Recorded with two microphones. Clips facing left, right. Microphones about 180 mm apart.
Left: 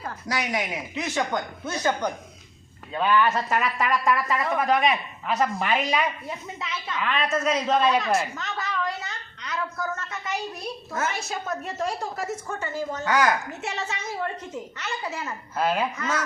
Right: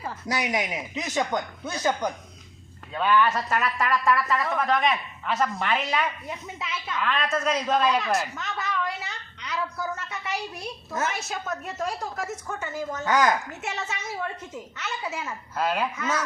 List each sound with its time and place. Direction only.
0.3 s speech: 20° right (ahead or behind)
2.9 s speech: 5° left (ahead or behind)
6.6 s a woman's voice: 5° right (ahead or behind)
11.3 s a woman's voice: centre (ahead or behind)
13.1 s a woman's voice: 20° right (ahead or behind)
13.6 s a woman's voice: centre (ahead or behind)